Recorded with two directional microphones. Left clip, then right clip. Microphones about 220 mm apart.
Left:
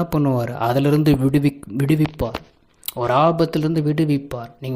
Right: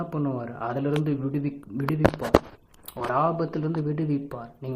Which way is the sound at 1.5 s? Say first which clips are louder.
Left 9 dB; 40° left (ahead or behind).